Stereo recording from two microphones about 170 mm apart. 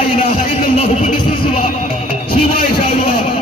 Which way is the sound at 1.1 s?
30° left (ahead or behind).